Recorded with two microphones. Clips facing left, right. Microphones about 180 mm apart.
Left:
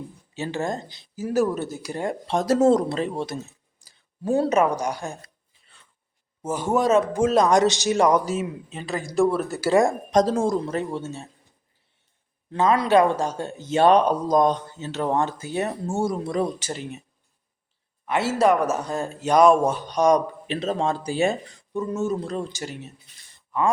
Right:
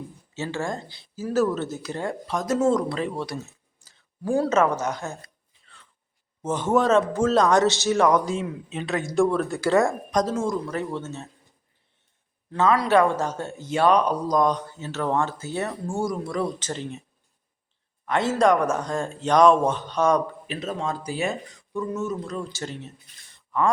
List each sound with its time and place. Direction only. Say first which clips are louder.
0.3 s speech: left 2 dB; 20° left (ahead or behind)
3.8 s a sound: even; 10° left (ahead or behind)
4.2 s speech: left 1 dB; 25° left (ahead or behind)
6.4 s speech: right 1 dB; 10° left (ahead or behind)
10.1 s speech: left 4 dB; 30° left (ahead or behind)
10.8 s speech: left 2 dB; 10° left (ahead or behind)
12.5 s speech: left 1 dB; 20° left (ahead or behind)
13.6 s speech: left 3 dB; 25° left (ahead or behind)
16.6 s speech: even; 10° left (ahead or behind)
18.0 s speech: even; 10° left (ahead or behind)
20.5 s speech: left 6 dB; 30° left (ahead or behind)
22.6 s speech: even; 10° left (ahead or behind)